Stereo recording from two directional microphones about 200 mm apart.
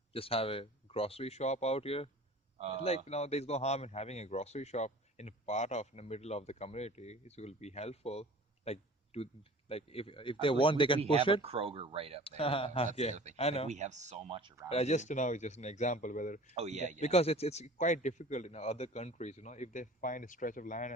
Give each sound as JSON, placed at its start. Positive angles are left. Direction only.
{"t": 0.1, "sound": "speech", "side_deg": 30}
{"t": 2.6, "sound": "a man's voice", "side_deg": -30}
{"t": 3.1, "sound": "speech", "side_deg": 30}
{"t": 11.0, "sound": "speech", "side_deg": -30}
{"t": 12.4, "sound": "speech", "side_deg": 25}
{"t": 13.7, "sound": "speech", "side_deg": -35}
{"t": 14.7, "sound": "speech", "side_deg": 30}
{"t": 16.5, "sound": "speech", "side_deg": -35}
{"t": 17.0, "sound": "speech", "side_deg": 30}